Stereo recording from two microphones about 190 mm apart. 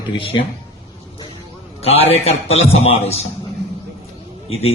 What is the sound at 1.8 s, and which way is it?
Speech, 30° left (ahead or behind).